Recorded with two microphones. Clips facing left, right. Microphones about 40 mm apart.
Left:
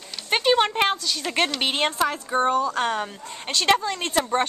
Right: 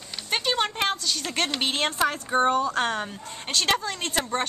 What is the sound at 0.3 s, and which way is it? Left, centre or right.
Speech, centre.